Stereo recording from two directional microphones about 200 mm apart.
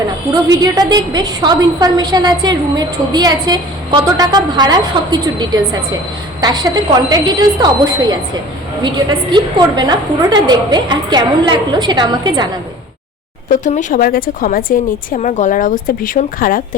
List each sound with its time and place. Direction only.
0.6 s a woman's voice: 20° right (ahead or behind)
13.5 s a woman's voice: 40° left (ahead or behind)